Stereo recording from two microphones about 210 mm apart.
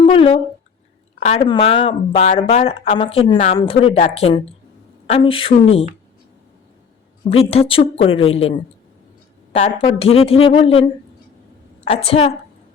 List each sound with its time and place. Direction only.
0.0 s speech: 25° left (ahead or behind)
7.3 s speech: 25° left (ahead or behind)
11.9 s speech: 30° left (ahead or behind)